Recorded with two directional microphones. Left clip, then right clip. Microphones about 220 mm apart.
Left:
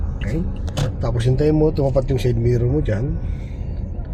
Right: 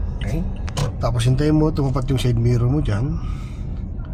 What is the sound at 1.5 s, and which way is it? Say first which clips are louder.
A man's voice: left 2 dB; 45° right (ahead or behind).